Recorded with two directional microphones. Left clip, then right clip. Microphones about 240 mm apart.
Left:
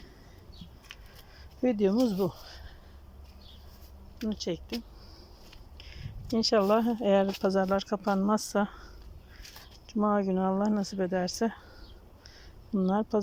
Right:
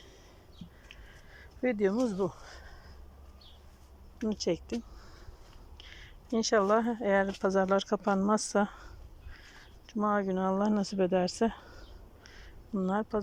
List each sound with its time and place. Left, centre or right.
1.6 s speech: centre
4.2 s speech: centre
5.7 s speech: centre
12.2 s quack: centre